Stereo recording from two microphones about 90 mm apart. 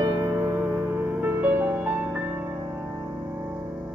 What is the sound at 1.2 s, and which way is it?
Music, 25° right (ahead or behind).